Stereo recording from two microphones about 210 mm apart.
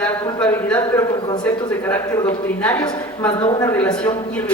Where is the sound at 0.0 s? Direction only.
5° left (ahead or behind).